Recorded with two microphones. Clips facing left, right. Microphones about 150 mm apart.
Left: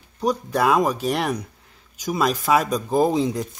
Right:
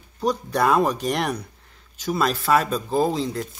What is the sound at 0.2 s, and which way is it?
Speech, 10° left (ahead or behind).